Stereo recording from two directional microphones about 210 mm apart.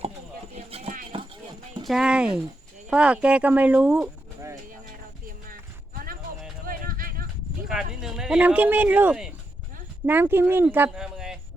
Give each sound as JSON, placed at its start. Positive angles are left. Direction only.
{"t": 0.5, "sound": "clip-clop", "side_deg": -30}
{"t": 1.8, "sound": "speech", "side_deg": 0}
{"t": 5.5, "sound": "clip-clop", "side_deg": -40}
{"t": 6.7, "sound": "a sound", "side_deg": -40}
{"t": 7.7, "sound": "speech", "side_deg": 0}